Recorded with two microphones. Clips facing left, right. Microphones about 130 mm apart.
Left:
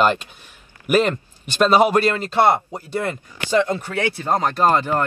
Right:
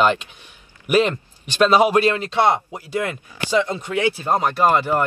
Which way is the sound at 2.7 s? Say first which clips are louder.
Even; 10° right (ahead or behind).